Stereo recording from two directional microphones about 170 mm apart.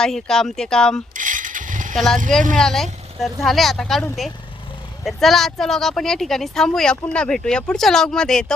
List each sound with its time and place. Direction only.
0.0 s speech: 5° left (ahead or behind)
1.1 s vehicle: 50° right (ahead or behind)
2.6 s speech: 5° left (ahead or behind)
5.0 s speech: centre (ahead or behind)